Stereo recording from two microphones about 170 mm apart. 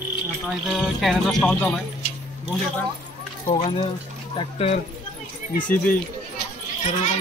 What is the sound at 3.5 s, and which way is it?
Speech, 35° left (ahead or behind).